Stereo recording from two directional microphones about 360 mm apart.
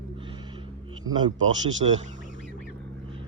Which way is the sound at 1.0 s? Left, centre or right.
Centre.